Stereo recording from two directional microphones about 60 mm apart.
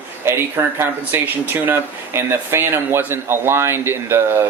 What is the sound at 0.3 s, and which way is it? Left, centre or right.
Speech, right.